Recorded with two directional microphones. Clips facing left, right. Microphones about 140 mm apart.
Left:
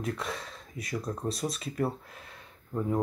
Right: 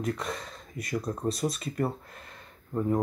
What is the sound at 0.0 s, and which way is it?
Speech, centre (ahead or behind).